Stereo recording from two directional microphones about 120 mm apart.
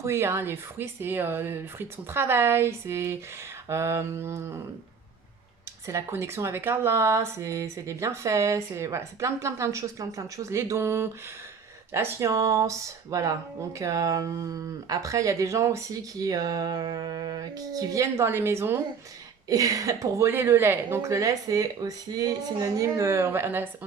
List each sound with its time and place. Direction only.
0.0 s a woman's voice: 20° right (ahead or behind)
5.8 s a woman's voice: 25° right (ahead or behind)